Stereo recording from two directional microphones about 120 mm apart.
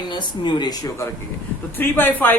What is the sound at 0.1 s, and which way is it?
Speech, 40° left (ahead or behind).